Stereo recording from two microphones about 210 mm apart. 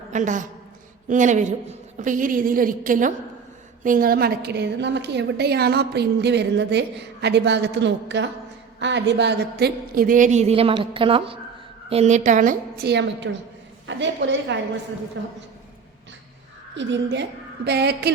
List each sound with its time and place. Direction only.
0.1 s a woman's voice: 35° right (ahead or behind); by 15.3 s 60° right (ahead or behind)
16.7 s a woman's voice: 55° right (ahead or behind)